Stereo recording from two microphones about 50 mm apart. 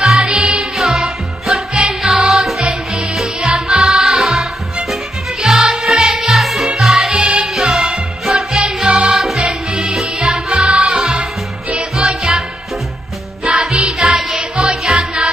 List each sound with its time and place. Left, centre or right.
0.2 s music: centre
0.7 s music: centre
7.2 s music: centre
9.4 s music: centre
13.6 s music: centre